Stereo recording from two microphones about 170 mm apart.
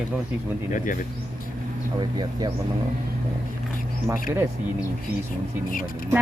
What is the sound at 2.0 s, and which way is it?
Speech, 25° right (ahead or behind).